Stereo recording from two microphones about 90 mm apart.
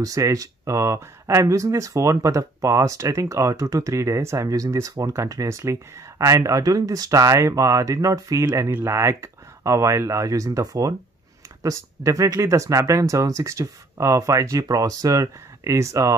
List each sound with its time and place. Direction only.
0.0 s speech: 40° right (ahead or behind)